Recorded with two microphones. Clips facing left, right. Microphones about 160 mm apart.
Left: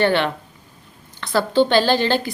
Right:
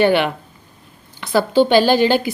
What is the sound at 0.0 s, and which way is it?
Speech, 10° right (ahead or behind).